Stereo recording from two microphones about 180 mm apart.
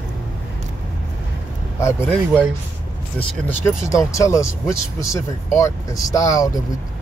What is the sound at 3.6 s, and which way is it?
Speech, 15° left (ahead or behind).